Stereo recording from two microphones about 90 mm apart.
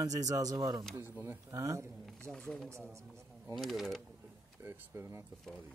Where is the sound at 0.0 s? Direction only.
40° right (ahead or behind).